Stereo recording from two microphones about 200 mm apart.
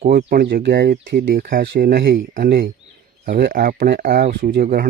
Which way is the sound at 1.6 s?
65° right (ahead or behind).